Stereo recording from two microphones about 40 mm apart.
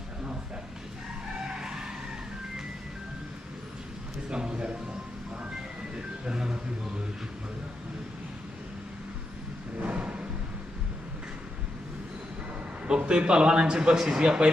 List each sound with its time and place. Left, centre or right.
1.5 s vehicle: centre
4.3 s a man's voice: right
6.0 s music: right
9.8 s a sound: right
12.8 s a man's voice: right